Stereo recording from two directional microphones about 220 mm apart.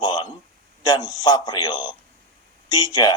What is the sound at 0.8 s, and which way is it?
A man's voice, 20° left (ahead or behind).